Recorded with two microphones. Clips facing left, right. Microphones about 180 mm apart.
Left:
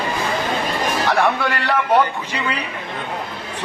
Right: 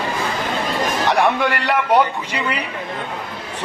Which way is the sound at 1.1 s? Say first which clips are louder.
Right 2 dB; 15° right (ahead or behind).